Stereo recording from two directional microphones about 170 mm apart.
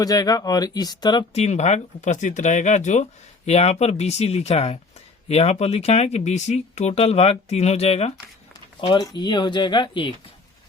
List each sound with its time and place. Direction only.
0.0 s speech: 20° left (ahead or behind)
1.3 s speech: 40° left (ahead or behind)
8.8 s speech: 25° left (ahead or behind)